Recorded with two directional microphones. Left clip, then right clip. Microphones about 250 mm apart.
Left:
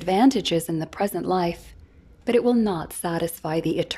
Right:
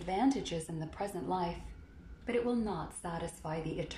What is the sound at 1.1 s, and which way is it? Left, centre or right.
A woman's voice, left.